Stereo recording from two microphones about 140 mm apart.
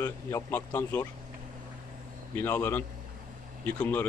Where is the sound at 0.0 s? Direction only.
20° left (ahead or behind).